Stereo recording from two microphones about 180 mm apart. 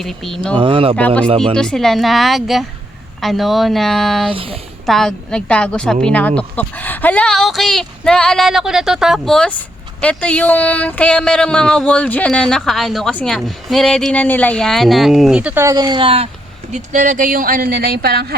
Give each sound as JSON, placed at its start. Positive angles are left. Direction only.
{"t": 0.0, "sound": "speech", "side_deg": 0}
{"t": 0.5, "sound": "speech", "side_deg": -30}
{"t": 0.9, "sound": "speech", "side_deg": 5}
{"t": 4.3, "sound": "speech", "side_deg": -30}
{"t": 4.9, "sound": "speech", "side_deg": 0}
{"t": 16.7, "sound": "a woman's voice", "side_deg": -45}